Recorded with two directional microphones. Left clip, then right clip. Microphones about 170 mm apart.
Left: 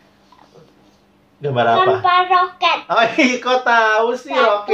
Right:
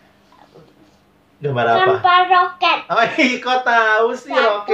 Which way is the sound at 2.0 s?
10° right (ahead or behind).